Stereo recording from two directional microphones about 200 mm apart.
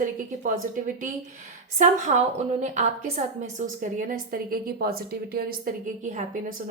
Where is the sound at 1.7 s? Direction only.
35° right (ahead or behind).